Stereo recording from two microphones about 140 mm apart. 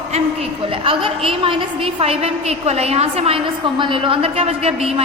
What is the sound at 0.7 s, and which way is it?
A woman's voice, 40° right (ahead or behind).